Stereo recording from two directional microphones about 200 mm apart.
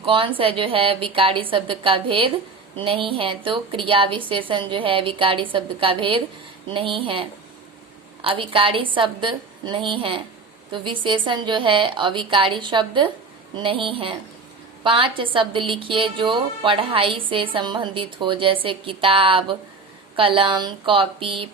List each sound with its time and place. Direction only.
0.0 s a woman's voice: 25° right (ahead or behind)